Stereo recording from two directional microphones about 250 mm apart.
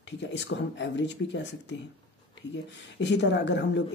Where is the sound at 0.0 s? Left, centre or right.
Left.